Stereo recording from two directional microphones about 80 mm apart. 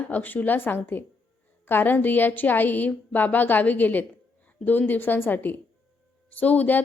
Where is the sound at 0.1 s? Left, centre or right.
Left.